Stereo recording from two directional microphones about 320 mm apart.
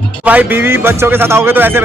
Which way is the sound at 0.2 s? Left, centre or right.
Centre.